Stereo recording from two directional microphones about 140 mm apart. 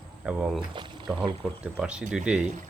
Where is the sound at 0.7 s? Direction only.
35° right (ahead or behind).